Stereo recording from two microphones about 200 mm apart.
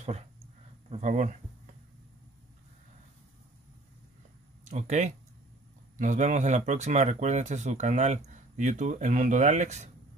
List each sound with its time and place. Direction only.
0.8 s speech: 35° right (ahead or behind)
4.6 s speech: 35° right (ahead or behind)